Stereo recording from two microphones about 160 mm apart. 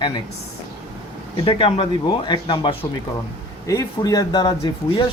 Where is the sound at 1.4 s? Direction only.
35° left (ahead or behind).